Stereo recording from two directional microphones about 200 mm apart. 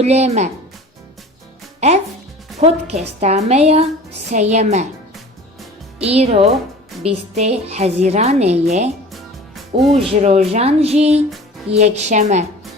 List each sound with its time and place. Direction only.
0.0 s a woman's voice: 35° right (ahead or behind)
1.8 s a woman's voice: 35° right (ahead or behind)
6.0 s a woman's voice: 30° right (ahead or behind)
9.1 s music: centre (ahead or behind)
10.1 s a woman's voice: 35° right (ahead or behind)